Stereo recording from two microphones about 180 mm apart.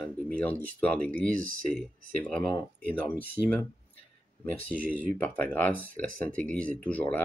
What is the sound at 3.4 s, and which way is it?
Speech, 15° right (ahead or behind).